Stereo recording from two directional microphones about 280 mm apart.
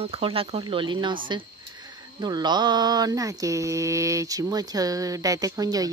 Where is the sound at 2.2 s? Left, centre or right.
Centre.